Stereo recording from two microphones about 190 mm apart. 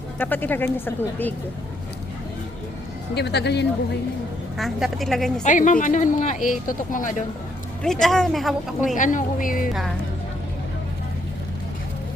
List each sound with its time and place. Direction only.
0.2 s speech: 10° left (ahead or behind)
3.2 s speech: 60° left (ahead or behind)
4.5 s speech: centre (ahead or behind)
5.4 s a woman's voice: 40° left (ahead or behind)
7.8 s speech: centre (ahead or behind)
9.0 s a woman's voice: 45° left (ahead or behind)